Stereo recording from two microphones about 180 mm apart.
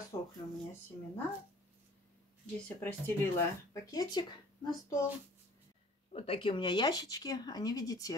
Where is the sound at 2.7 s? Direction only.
10° left (ahead or behind).